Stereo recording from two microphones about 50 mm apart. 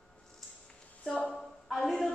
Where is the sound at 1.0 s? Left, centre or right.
Centre.